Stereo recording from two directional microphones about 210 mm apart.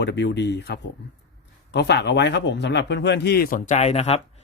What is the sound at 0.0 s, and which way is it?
A man's voice, 55° left (ahead or behind).